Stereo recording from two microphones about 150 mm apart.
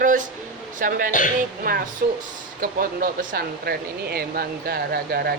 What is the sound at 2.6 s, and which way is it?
Speech, 70° right (ahead or behind).